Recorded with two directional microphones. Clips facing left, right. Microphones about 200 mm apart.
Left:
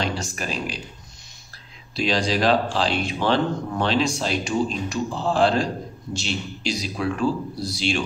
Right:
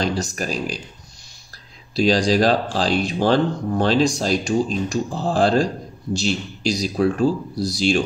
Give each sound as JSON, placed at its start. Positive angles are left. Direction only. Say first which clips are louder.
{"t": 0.0, "sound": "speech", "louder": "right 4 dB", "side_deg": -40}
{"t": 2.0, "sound": "speech", "louder": "right 6 dB", "side_deg": -35}